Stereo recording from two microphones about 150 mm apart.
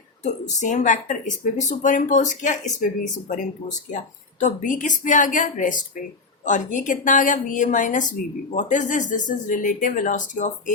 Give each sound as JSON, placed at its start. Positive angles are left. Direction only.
{"t": 0.2, "sound": "speech", "side_deg": 50}